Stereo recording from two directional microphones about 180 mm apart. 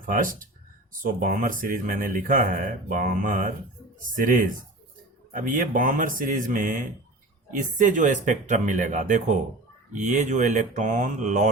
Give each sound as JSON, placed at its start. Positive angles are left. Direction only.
{"t": 0.0, "sound": "speech", "side_deg": -50}